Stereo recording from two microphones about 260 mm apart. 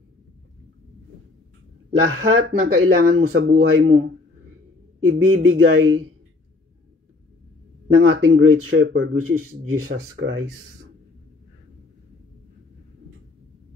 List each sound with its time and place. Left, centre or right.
2.3 s speech: right
5.0 s speech: right
7.9 s speech: right